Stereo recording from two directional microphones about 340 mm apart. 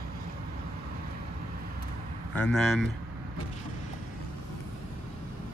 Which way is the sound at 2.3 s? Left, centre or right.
Centre.